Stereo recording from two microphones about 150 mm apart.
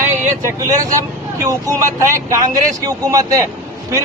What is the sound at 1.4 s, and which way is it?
Speech, 20° right (ahead or behind).